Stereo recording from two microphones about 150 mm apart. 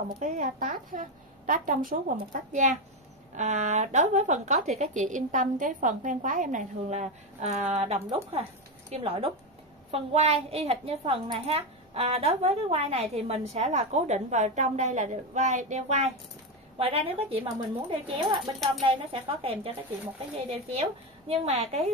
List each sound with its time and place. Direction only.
0.2 s a woman's voice: 60° right (ahead or behind); by 21.9 s 45° right (ahead or behind)